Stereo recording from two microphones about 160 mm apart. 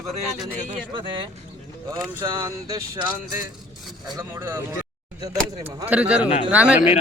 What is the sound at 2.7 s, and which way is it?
Speech, 25° right (ahead or behind).